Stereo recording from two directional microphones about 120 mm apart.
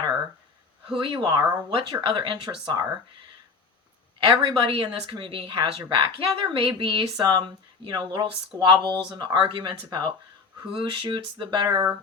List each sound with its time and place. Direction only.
0.9 s speech: 45° right (ahead or behind)
4.2 s a woman's voice: 45° right (ahead or behind)